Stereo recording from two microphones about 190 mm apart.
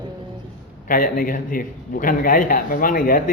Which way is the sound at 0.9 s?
45° left (ahead or behind).